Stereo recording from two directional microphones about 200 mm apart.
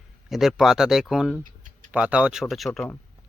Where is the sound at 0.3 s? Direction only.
Centre (ahead or behind).